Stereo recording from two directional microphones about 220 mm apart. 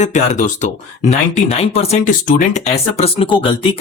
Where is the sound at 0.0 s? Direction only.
35° left (ahead or behind).